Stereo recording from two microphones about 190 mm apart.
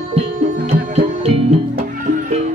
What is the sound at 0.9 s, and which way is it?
Music, 30° right (ahead or behind).